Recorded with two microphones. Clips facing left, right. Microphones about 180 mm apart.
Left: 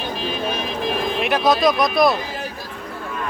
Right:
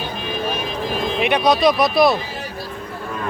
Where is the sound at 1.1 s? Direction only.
Centre (ahead or behind).